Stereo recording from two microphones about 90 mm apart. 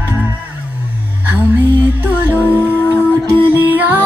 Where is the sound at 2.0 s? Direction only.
20° right (ahead or behind).